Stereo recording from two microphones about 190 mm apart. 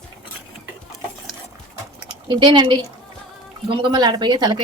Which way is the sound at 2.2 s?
25° right (ahead or behind).